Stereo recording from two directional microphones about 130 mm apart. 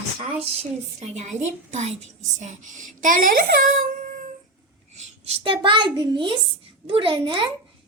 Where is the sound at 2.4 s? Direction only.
70° right (ahead or behind); by 3.4 s 90° right.